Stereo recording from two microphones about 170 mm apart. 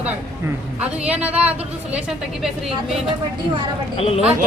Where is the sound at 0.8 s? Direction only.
10° right (ahead or behind).